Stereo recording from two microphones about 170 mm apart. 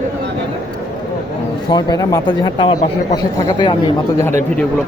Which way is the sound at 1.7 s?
20° left (ahead or behind).